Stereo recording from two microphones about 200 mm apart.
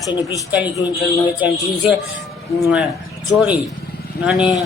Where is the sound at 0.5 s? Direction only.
10° right (ahead or behind).